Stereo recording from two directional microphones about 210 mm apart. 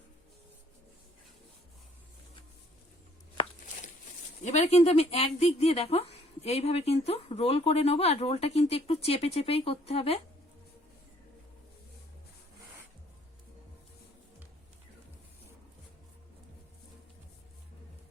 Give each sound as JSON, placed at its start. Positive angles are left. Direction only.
{"t": 4.4, "sound": "speech", "side_deg": 30}